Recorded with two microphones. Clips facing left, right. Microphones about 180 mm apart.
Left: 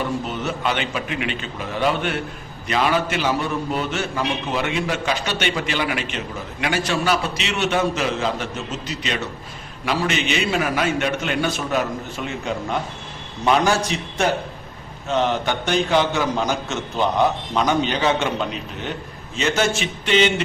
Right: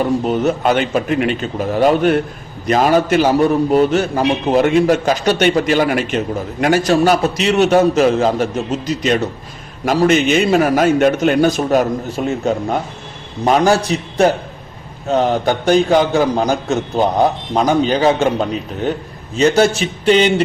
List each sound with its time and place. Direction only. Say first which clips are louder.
0.0 s a man's voice: right 9 dB; 40° right (ahead or behind)